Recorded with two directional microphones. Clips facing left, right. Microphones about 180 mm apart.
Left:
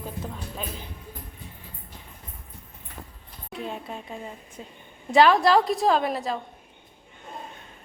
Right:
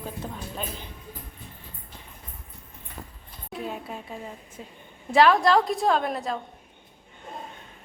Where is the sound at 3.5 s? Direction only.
5° right (ahead or behind).